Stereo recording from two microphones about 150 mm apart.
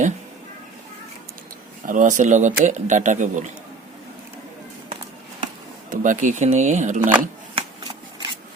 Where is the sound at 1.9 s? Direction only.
55° right (ahead or behind).